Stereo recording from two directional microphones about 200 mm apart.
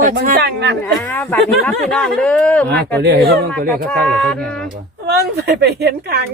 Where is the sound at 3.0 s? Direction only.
55° right (ahead or behind).